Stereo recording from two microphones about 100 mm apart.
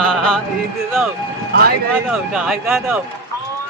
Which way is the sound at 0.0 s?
10° left (ahead or behind).